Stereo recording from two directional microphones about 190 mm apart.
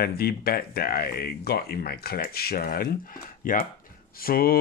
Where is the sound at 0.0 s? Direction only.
55° left (ahead or behind).